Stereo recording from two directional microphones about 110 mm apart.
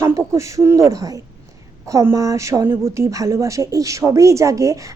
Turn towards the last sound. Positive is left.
turn(degrees=-30)  # may be behind; listen again after turning